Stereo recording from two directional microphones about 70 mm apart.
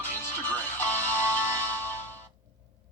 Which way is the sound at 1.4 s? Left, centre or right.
Left.